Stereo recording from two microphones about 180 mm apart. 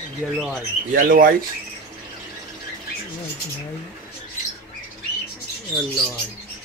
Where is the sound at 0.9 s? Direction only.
50° right (ahead or behind).